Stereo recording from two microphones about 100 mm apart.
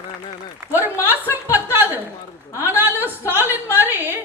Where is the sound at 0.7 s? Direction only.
20° right (ahead or behind).